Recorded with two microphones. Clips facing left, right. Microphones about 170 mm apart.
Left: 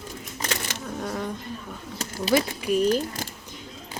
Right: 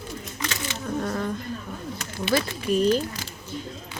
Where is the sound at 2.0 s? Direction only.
35° left (ahead or behind).